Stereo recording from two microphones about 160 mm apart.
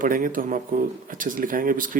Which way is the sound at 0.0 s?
60° right (ahead or behind).